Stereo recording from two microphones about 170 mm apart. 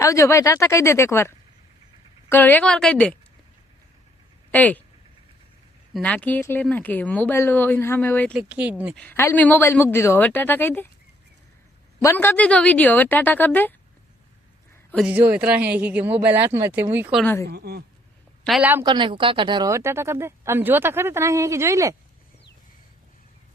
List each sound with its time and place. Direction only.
0.0 s speech: 15° left (ahead or behind)
2.3 s speech: 10° left (ahead or behind)
4.5 s speech: 10° left (ahead or behind)
5.9 s speech: 5° left (ahead or behind)
8.3 s a woman's voice: 5° right (ahead or behind)
9.0 s speech: 10° left (ahead or behind)
11.9 s speech: 15° left (ahead or behind)
15.0 s a woman's voice: 10° right (ahead or behind)
17.2 s speech: 15° left (ahead or behind)
17.5 s speech: 70° right (ahead or behind)
18.4 s a woman's voice: 5° right (ahead or behind)
18.8 s a woman's voice: 25° right (ahead or behind)